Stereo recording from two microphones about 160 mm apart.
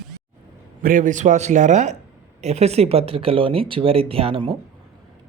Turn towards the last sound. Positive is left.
turn(degrees=-35)  # may be behind; listen again after turning